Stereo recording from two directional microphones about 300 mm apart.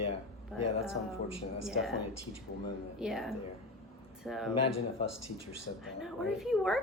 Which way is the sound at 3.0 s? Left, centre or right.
Centre.